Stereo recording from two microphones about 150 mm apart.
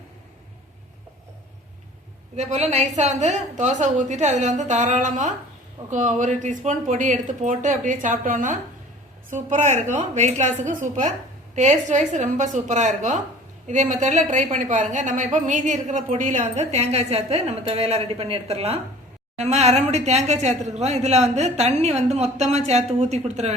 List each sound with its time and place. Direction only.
2.3 s a woman's voice: 50° right (ahead or behind)